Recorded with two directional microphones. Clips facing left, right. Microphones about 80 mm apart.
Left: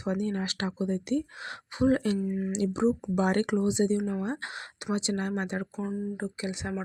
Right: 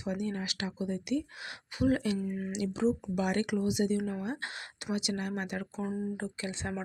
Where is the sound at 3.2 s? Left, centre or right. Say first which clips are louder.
Left 4 dB; left.